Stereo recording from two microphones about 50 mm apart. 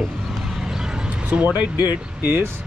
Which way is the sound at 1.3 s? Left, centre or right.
Right.